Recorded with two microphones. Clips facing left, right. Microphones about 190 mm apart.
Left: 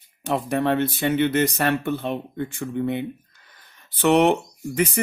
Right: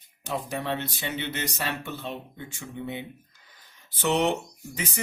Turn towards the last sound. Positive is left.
turn(degrees=55)  # may be behind; listen again after turning